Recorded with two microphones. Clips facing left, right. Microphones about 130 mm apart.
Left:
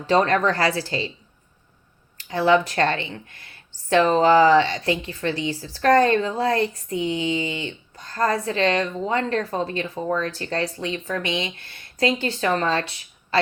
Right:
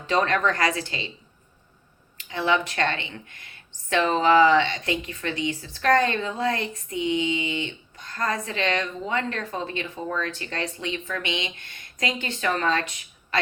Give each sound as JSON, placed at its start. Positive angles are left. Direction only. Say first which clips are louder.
{"t": 0.1, "sound": "speech", "louder": "left 4 dB", "side_deg": 35}
{"t": 2.1, "sound": "speech", "louder": "left 6 dB", "side_deg": 35}